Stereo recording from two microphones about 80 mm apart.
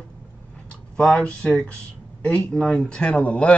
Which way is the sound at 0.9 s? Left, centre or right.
Centre.